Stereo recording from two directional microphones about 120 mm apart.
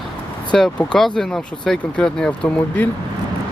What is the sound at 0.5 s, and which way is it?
Speech, 5° left (ahead or behind).